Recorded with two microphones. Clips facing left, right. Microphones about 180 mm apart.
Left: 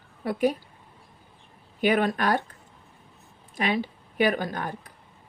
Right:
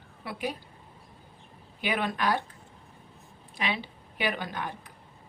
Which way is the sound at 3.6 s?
45° left (ahead or behind).